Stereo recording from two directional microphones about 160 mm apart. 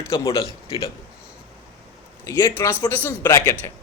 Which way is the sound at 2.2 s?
20° left (ahead or behind).